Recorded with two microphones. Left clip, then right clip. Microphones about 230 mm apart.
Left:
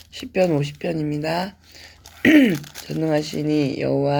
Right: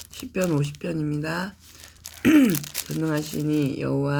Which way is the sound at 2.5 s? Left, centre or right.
Centre.